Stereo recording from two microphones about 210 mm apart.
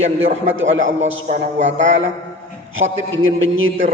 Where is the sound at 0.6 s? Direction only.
65° right (ahead or behind).